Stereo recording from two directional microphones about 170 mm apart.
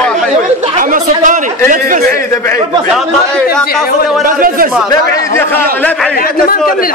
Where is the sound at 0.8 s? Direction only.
50° right (ahead or behind).